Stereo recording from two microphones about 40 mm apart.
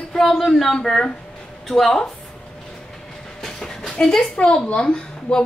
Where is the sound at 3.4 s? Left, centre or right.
Centre.